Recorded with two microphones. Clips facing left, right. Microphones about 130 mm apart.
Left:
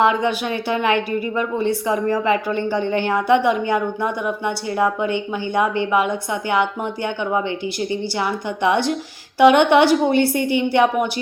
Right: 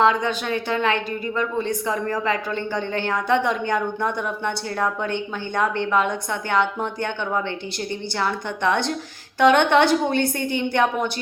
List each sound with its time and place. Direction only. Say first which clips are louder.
0.0 s speech: left 2 dB; 15° left (ahead or behind)